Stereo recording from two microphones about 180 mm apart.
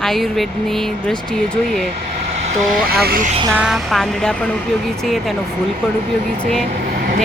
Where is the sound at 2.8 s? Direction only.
55° right (ahead or behind).